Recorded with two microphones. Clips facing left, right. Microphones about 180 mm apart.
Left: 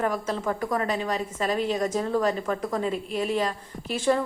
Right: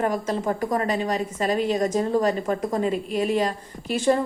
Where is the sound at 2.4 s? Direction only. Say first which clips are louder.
Right 3 dB; 20° right (ahead or behind).